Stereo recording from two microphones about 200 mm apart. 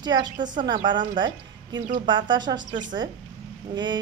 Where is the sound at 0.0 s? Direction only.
20° right (ahead or behind).